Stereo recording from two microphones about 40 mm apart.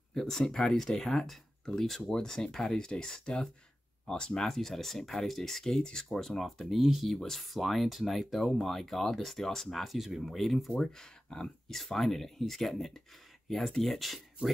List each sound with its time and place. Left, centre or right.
0.1 s speech: centre
4.5 s speech: centre
7.2 s speech: centre
10.8 s speech: centre
11.7 s speech: centre